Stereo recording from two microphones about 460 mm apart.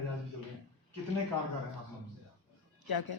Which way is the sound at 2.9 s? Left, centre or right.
Left.